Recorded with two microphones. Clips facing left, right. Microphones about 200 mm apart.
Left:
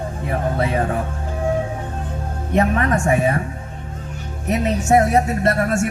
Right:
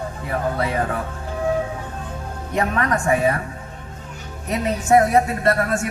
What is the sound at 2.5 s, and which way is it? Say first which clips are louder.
Speech: left 3 dB; 25° left (ahead or behind).